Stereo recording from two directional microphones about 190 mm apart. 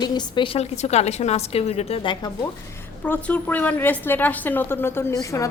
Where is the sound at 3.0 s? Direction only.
10° left (ahead or behind).